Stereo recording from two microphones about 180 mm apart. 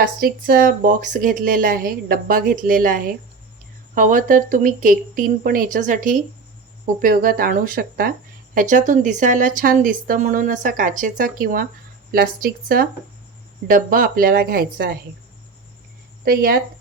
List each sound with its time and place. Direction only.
0.0 s speech: 55° right (ahead or behind)
16.2 s speech: 55° right (ahead or behind)